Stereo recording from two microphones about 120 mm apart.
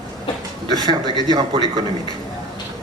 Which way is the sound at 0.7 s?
35° right (ahead or behind).